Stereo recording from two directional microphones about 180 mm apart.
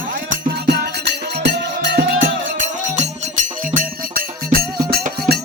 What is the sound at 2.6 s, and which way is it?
Music, 40° right (ahead or behind).